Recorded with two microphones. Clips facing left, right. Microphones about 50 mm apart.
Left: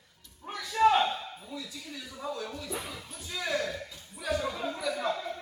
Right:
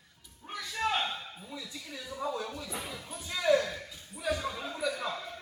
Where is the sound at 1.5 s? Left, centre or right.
Centre.